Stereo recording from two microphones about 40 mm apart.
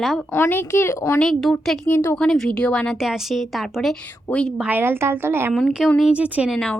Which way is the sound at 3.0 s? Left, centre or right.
Centre.